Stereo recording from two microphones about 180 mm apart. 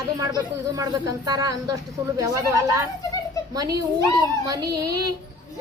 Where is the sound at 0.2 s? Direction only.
20° right (ahead or behind).